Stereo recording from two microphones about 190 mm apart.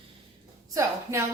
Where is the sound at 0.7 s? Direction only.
15° right (ahead or behind).